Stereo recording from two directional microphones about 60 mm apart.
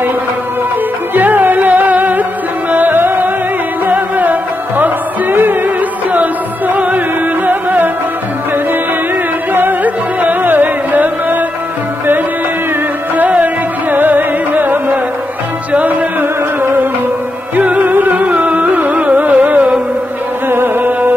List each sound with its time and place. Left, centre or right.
1.1 s music: right
7.4 s music: right
9.5 s music: right
13.1 s music: right
17.6 s music: right